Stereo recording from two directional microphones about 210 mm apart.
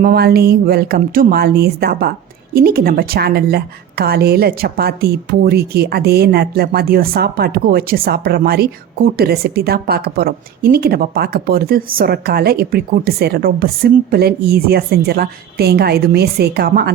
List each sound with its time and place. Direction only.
0.0 s a woman's voice: 50° right (ahead or behind)